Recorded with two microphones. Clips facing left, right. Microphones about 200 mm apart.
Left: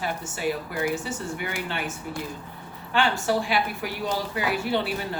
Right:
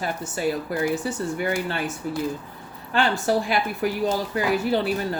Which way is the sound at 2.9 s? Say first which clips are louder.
Right 2 dB; 40° right (ahead or behind).